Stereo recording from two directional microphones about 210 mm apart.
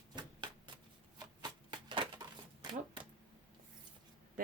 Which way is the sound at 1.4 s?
20° right (ahead or behind).